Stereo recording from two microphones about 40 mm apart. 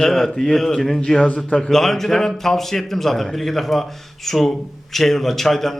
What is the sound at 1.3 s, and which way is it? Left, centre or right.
Speech, left.